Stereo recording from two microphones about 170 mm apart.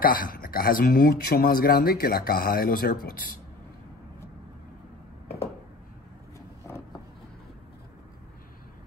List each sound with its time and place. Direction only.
0.0 s speech: 55° left (ahead or behind)